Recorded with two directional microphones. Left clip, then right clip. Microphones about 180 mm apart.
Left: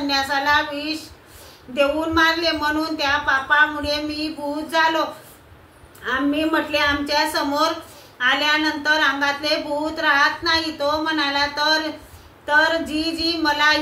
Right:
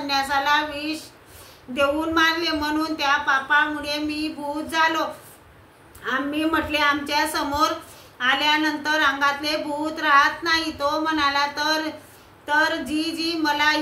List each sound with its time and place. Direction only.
0.0 s a sound: 20° right (ahead or behind)
1.8 s a woman's voice: 20° right (ahead or behind)
6.0 s a woman's voice: 20° right (ahead or behind)